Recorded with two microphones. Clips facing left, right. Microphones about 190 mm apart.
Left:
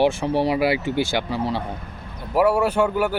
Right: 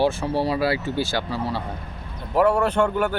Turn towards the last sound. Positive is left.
turn(degrees=10)  # may be behind; listen again after turning